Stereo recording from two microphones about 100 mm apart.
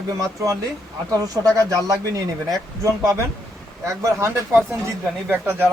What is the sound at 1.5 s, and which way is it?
Speech, 35° right (ahead or behind).